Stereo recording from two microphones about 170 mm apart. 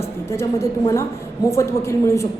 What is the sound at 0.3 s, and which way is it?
A woman's voice, 15° left (ahead or behind).